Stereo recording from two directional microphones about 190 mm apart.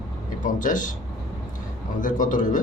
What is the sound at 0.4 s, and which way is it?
Speech, 40° left (ahead or behind).